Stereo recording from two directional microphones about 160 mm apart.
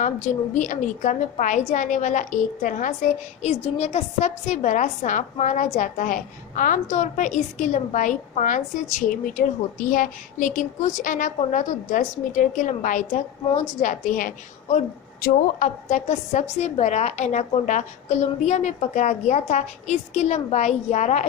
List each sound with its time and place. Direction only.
0.5 s a woman's voice: 50° left (ahead or behind)